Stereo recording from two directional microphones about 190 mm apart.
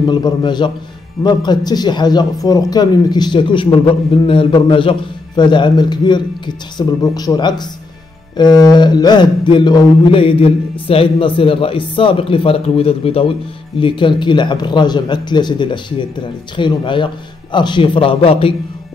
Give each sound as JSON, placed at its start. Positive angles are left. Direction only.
{"t": 0.0, "sound": "a man's voice", "side_deg": 25}